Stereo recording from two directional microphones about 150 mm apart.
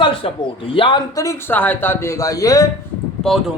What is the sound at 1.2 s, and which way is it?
Speech, 20° left (ahead or behind).